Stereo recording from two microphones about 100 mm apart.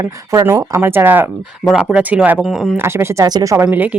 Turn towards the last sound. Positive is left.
turn(degrees=-15)  # may be behind; listen again after turning